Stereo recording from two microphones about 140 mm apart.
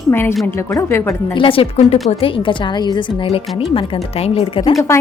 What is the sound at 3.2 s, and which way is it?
A woman's voice, 45° left (ahead or behind).